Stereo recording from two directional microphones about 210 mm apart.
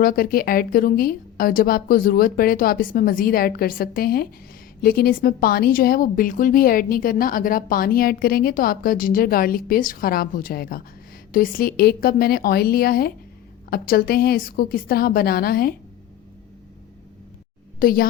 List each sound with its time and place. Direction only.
0.0 s a woman's voice: 45° left (ahead or behind)
17.7 s a woman's voice: 45° left (ahead or behind)